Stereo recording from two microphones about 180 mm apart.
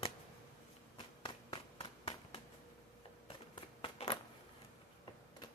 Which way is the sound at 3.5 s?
30° left (ahead or behind).